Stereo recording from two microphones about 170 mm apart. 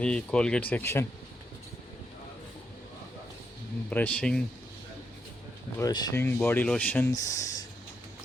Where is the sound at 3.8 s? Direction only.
10° left (ahead or behind).